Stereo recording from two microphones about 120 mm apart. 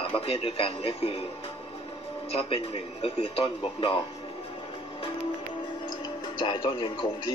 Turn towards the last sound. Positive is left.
turn(degrees=45)  # may be behind; listen again after turning